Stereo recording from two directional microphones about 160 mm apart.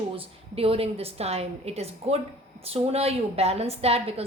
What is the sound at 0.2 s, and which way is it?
A woman's voice, 35° right (ahead or behind).